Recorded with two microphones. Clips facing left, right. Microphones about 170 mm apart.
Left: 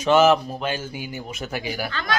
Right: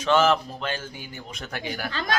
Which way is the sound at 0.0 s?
10° left (ahead or behind).